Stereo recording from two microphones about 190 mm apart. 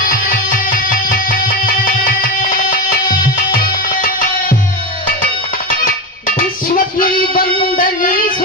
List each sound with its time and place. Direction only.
0.0 s music: 45° left (ahead or behind)
6.7 s music: 50° left (ahead or behind)